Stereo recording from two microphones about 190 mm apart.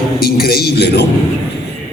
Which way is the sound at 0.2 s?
55° left (ahead or behind).